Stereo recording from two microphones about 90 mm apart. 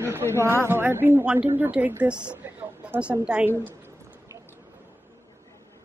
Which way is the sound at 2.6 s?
15° right (ahead or behind).